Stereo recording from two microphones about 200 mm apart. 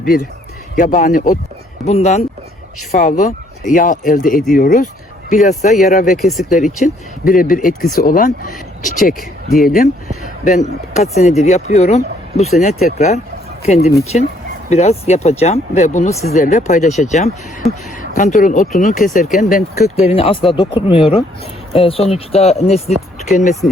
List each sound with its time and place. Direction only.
0.0 s speech: 45° left (ahead or behind)
6.2 s speech: centre (ahead or behind)
6.8 s speech: 45° left (ahead or behind)
10.9 s speech: 35° left (ahead or behind)